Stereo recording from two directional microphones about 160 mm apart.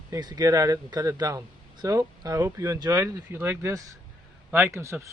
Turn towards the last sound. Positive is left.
turn(degrees=-15)  # may be behind; listen again after turning